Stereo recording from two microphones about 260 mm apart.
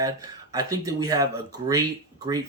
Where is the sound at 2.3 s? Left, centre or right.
Centre.